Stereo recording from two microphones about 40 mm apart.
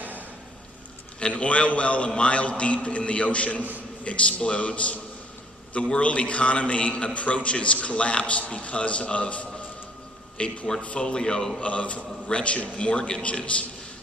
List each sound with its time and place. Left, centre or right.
1.4 s a man's voice: left
11.6 s a man's voice: left